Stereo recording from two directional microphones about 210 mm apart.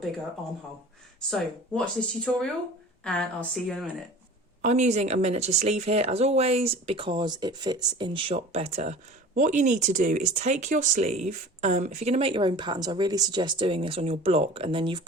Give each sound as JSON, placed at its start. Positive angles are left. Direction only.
{"t": 1.3, "sound": "speech", "side_deg": 5}
{"t": 4.6, "sound": "speech", "side_deg": -35}